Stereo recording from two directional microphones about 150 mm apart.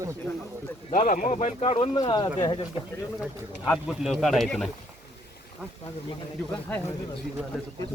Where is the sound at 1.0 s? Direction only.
60° left (ahead or behind).